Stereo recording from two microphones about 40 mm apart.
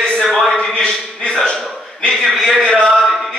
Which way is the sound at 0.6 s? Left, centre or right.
Centre.